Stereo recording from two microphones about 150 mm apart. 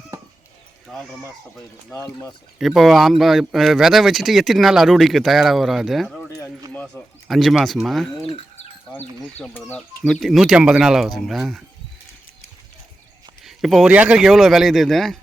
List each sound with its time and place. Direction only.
0.9 s speech: 5° left (ahead or behind)
2.6 s speech: centre (ahead or behind)
6.2 s a sound: 20° left (ahead or behind)
6.7 s speech: 5° left (ahead or behind)
8.3 s bird: 30° left (ahead or behind)
9.2 s speech: 5° left (ahead or behind)
9.6 s speech: 15° left (ahead or behind)
10.1 s speech: centre (ahead or behind)
13.4 s a sound: centre (ahead or behind)
13.9 s speech: 10° right (ahead or behind)